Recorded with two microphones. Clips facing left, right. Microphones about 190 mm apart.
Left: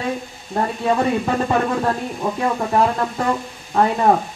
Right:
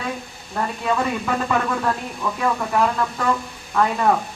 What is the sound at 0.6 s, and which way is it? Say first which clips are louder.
Speech: left 4 dB; 35° left (ahead or behind).